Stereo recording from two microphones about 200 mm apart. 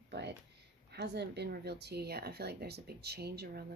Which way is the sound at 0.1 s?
55° right (ahead or behind).